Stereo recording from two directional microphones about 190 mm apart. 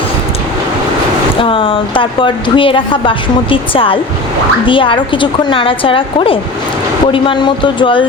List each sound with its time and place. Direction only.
1.4 s speech: 25° left (ahead or behind)